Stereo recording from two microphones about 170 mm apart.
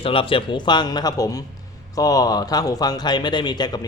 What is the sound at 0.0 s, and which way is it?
Speech, 30° left (ahead or behind).